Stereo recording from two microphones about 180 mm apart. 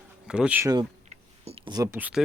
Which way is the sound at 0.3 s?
5° right (ahead or behind).